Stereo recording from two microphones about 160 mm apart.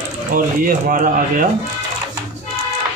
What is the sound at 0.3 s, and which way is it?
Speech, 60° right (ahead or behind).